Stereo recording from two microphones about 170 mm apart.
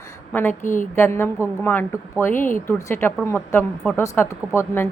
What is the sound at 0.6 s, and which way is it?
Speech, 50° left (ahead or behind).